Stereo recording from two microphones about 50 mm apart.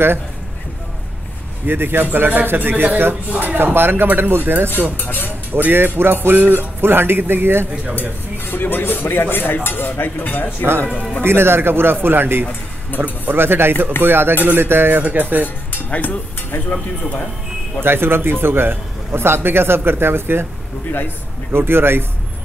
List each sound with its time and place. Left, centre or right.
1.7 s a man's voice: right
4.9 s speech: left
5.5 s a man's voice: right
8.5 s cutlery: left
11.2 s a man's voice: right
13.0 s speech: right
13.4 s a man's voice: right
15.4 s speech: left
17.8 s a man's voice: right
21.5 s a man's voice: right